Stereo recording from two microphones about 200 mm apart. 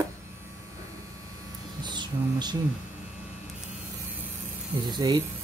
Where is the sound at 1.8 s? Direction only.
20° right (ahead or behind).